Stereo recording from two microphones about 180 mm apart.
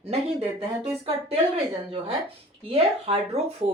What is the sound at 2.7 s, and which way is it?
Speech, 30° right (ahead or behind).